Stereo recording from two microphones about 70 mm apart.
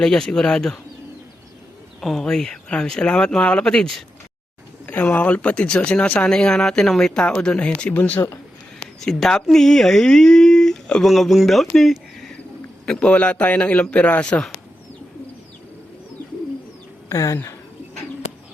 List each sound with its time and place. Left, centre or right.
0.0 s speech: centre
2.0 s speech: centre
4.9 s speech: left
7.9 s a man's voice: left
9.0 s speech: centre
12.8 s a man's voice: centre
17.1 s speech: left